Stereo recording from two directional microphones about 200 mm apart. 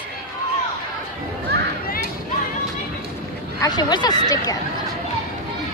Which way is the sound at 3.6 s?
20° left (ahead or behind).